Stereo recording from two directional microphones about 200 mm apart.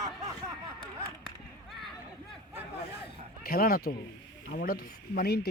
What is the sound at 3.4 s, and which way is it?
Speech, 50° left (ahead or behind).